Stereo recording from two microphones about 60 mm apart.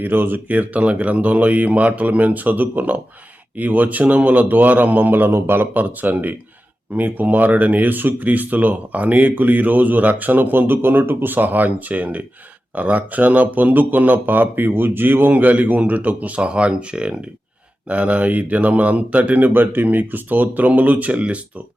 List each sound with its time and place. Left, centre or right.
0.0 s speech: right